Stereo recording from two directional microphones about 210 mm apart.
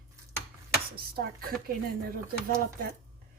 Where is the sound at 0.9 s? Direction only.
45° right (ahead or behind).